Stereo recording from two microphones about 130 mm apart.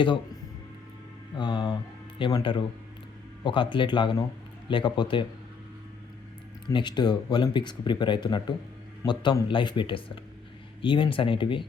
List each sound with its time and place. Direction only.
1.4 s speech: 40° left (ahead or behind)
6.7 s speech: 35° left (ahead or behind)